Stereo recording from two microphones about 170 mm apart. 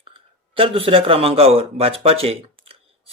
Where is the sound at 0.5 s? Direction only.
30° right (ahead or behind).